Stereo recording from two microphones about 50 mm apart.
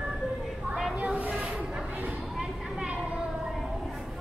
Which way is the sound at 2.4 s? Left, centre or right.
Centre.